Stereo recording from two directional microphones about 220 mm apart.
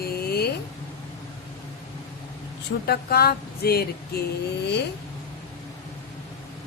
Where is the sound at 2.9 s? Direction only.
45° left (ahead or behind).